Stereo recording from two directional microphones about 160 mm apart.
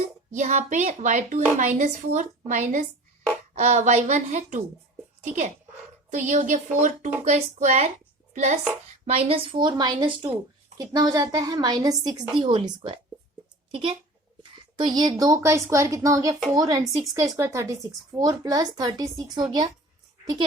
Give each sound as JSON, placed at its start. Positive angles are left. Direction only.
{"t": 0.3, "sound": "a woman's voice", "side_deg": -50}
{"t": 9.0, "sound": "a woman's voice", "side_deg": -35}